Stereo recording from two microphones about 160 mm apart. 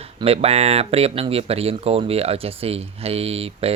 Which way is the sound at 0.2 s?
40° right (ahead or behind).